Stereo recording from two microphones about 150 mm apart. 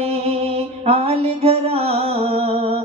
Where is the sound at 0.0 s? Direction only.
45° right (ahead or behind).